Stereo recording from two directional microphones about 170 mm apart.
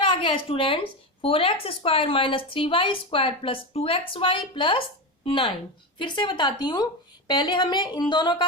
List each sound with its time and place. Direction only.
0.0 s a woman's voice: 30° left (ahead or behind)